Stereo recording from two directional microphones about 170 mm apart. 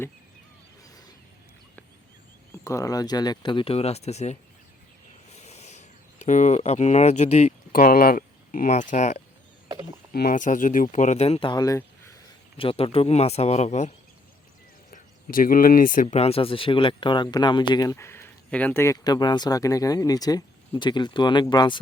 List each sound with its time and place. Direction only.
2.6 s speech: 20° left (ahead or behind); by 4.4 s 40° left (ahead or behind)
5.3 s a sound: 40° left (ahead or behind)
7.7 s speech: 60° left (ahead or behind)
10.1 s speech: 60° left (ahead or behind); by 12.2 s 15° left (ahead or behind)
12.5 s speech: 35° left (ahead or behind)